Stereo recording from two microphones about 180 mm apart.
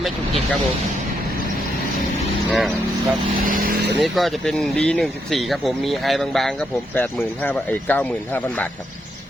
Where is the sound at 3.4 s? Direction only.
50° right (ahead or behind).